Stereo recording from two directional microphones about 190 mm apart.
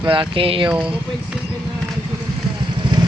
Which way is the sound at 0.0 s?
25° right (ahead or behind).